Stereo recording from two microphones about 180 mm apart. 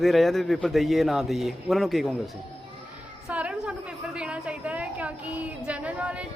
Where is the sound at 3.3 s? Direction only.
5° right (ahead or behind).